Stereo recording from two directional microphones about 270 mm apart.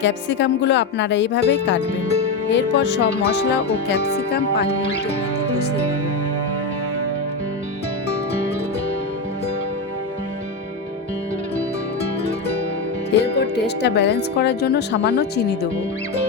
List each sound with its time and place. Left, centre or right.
0.0 s speech: left
13.1 s speech: left